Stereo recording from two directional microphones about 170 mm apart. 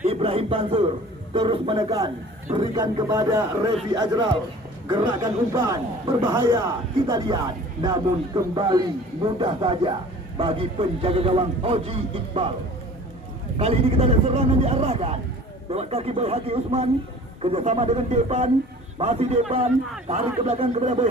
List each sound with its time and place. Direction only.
0.0 s a man's voice: 35° right (ahead or behind)
13.6 s a man's voice: 35° right (ahead or behind)